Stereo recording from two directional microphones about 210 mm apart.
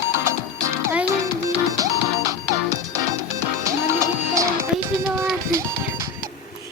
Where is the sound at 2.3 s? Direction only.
15° right (ahead or behind).